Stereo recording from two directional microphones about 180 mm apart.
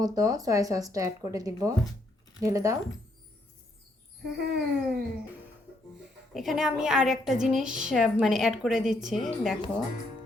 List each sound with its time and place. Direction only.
0.0 s a woman's voice: 20° right (ahead or behind)
4.4 s a sound: 65° right (ahead or behind)
6.3 s a woman's voice: centre (ahead or behind)